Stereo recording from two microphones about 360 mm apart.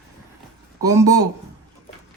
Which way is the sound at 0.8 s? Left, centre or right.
Centre.